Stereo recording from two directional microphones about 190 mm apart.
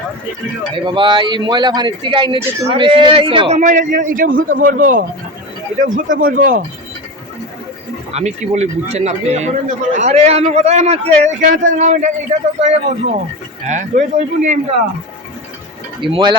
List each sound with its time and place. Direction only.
0.7 s speech: 25° right (ahead or behind)
3.6 s a man's voice: 45° right (ahead or behind)
8.1 s a man's voice: 35° right (ahead or behind)
16.0 s speech: 25° right (ahead or behind)